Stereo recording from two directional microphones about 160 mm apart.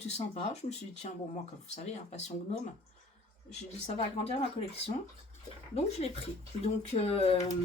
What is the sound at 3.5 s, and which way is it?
Speech, 45° left (ahead or behind).